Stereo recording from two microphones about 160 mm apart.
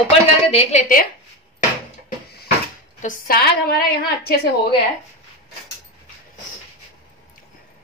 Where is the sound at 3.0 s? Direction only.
65° left (ahead or behind); by 4.5 s 80° left.